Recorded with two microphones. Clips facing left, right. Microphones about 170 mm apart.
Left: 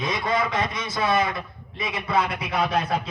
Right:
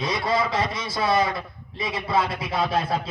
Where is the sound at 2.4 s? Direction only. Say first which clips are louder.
Even; 15° left (ahead or behind).